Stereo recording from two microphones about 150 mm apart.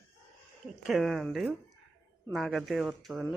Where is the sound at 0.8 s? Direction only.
Centre (ahead or behind).